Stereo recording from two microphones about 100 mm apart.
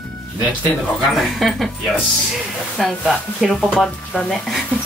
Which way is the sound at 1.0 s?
Centre (ahead or behind).